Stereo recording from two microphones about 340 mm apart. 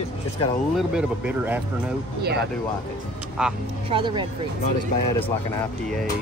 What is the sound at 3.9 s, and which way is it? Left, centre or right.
Speech, centre.